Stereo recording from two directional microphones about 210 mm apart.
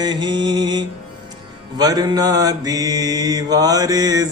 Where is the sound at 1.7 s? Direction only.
20° right (ahead or behind).